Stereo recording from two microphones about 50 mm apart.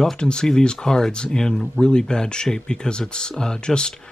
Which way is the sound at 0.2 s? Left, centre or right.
Centre.